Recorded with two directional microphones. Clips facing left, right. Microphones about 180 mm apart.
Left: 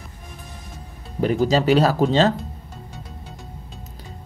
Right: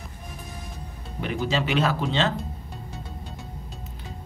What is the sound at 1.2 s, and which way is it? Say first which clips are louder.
Speech: left 8 dB; 40° left (ahead or behind).